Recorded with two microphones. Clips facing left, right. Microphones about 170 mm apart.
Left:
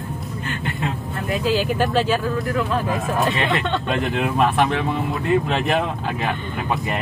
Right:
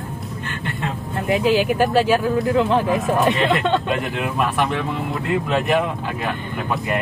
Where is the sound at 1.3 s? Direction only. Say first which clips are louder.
Right 4 dB; 15° right (ahead or behind).